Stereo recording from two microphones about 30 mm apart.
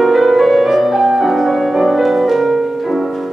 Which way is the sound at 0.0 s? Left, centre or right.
Centre.